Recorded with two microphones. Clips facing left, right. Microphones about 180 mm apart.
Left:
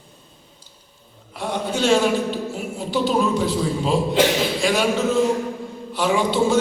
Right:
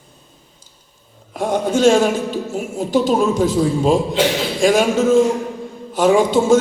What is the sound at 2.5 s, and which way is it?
A man's voice, 45° right (ahead or behind).